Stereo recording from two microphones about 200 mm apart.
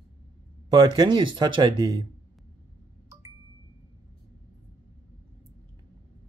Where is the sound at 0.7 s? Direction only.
20° right (ahead or behind).